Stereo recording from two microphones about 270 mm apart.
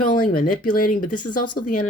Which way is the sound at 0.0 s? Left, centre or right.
Left.